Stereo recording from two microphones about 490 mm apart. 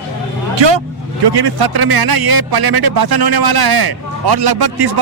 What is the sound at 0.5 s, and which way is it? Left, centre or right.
A man's voice, right.